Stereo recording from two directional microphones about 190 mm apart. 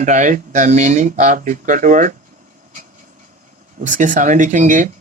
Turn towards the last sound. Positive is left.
turn(degrees=-40)  # may be behind; listen again after turning